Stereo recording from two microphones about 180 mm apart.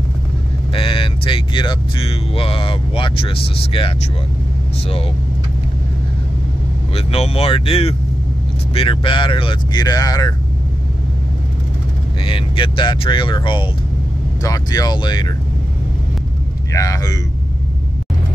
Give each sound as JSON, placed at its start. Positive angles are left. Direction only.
{"t": 0.7, "sound": "speech", "side_deg": 30}
{"t": 6.9, "sound": "speech", "side_deg": 35}
{"t": 12.3, "sound": "speech", "side_deg": 30}
{"t": 16.7, "sound": "speech", "side_deg": 20}